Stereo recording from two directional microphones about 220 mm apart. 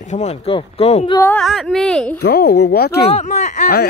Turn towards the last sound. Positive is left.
turn(degrees=40)  # may be behind; listen again after turning